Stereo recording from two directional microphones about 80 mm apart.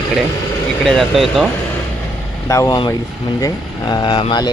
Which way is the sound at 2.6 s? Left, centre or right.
Left.